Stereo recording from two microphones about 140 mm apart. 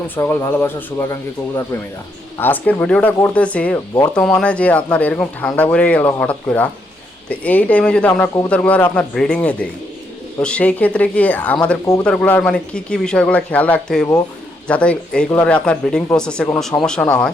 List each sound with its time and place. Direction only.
0.2 s speech: 20° left (ahead or behind)